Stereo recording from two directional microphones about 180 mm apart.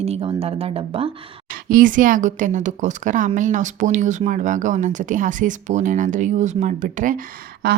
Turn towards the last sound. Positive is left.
turn(degrees=-60)  # may be behind; listen again after turning